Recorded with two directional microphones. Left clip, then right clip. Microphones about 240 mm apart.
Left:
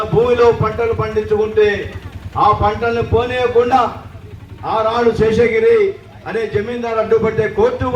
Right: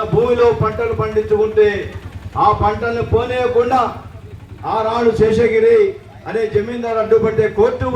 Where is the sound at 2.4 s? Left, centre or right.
Centre.